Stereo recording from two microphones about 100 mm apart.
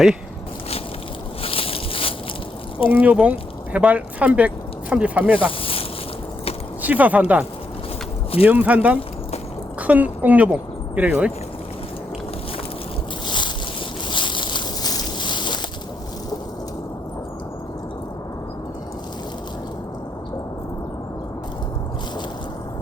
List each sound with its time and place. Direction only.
1.4 s a sound: 70° left (ahead or behind)
2.9 s speech: 15° right (ahead or behind)
5.4 s speech: 65° left (ahead or behind)
6.8 s speech: 15° right (ahead or behind)
8.4 s speech: 15° right (ahead or behind)
13.2 s boat: 50° left (ahead or behind)
14.1 s a sound: 55° left (ahead or behind)